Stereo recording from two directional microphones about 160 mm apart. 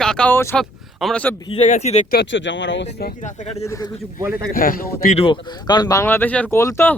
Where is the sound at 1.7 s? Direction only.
45° left (ahead or behind).